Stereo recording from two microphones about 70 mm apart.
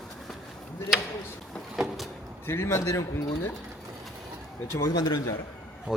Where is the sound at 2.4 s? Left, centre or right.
Left.